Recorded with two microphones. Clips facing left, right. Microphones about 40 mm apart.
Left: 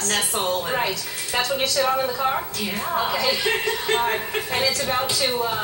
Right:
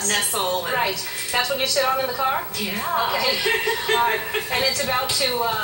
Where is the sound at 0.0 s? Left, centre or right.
Centre.